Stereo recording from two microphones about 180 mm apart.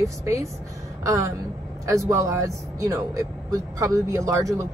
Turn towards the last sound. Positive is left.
turn(degrees=-20)  # may be behind; listen again after turning